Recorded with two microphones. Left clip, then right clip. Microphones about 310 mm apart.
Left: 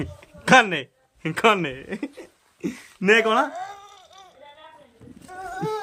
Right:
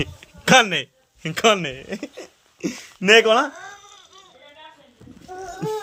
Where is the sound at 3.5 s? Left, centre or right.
Centre.